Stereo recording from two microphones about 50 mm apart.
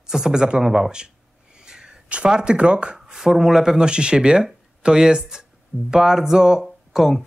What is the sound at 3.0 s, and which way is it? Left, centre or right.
Speech, centre.